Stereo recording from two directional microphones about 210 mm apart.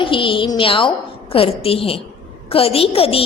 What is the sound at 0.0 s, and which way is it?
A woman's voice, 25° left (ahead or behind).